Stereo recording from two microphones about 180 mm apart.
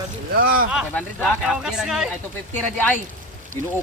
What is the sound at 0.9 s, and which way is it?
Speech, 5° left (ahead or behind).